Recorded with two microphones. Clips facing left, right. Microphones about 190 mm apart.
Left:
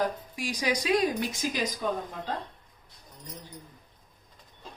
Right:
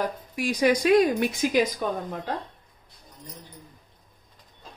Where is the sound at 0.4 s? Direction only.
60° right (ahead or behind).